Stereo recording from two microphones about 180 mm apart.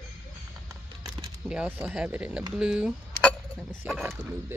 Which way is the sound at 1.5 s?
10° right (ahead or behind).